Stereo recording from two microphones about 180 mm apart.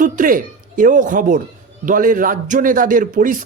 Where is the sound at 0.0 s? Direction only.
50° right (ahead or behind).